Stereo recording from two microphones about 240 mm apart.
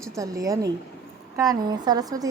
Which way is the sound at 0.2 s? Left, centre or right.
Centre.